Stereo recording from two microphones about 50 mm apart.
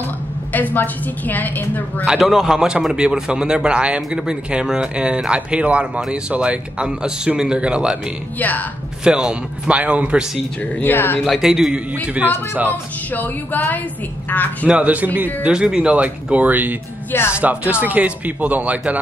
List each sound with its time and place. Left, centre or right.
0.5 s a woman's voice: left
2.2 s speech: centre
8.4 s a woman's voice: left
9.0 s speech: centre
10.8 s a woman's voice: left
11.4 s a man's voice: centre
11.7 s speech: right
12.6 s a woman's voice: left
14.7 s speech: right
15.4 s speech: centre